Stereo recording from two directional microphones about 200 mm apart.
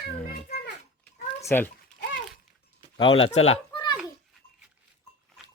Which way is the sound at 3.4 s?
30° left (ahead or behind).